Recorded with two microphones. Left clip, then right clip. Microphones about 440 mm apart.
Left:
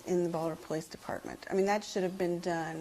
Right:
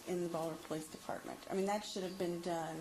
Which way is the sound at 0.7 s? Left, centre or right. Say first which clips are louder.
Left 6 dB; left.